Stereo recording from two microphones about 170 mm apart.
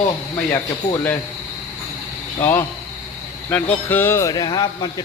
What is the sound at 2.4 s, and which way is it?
Speech, 10° left (ahead or behind).